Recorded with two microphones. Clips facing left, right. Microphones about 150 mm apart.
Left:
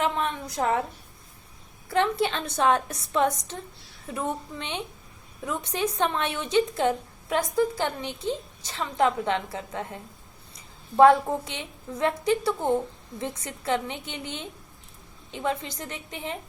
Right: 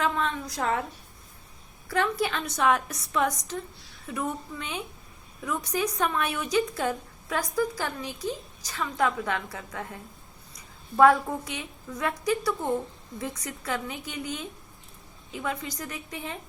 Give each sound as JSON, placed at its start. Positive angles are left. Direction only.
{"t": 0.0, "sound": "a woman's voice", "side_deg": 20}
{"t": 1.9, "sound": "a woman's voice", "side_deg": 25}